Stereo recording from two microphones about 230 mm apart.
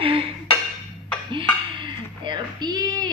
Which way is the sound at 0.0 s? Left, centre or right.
Right.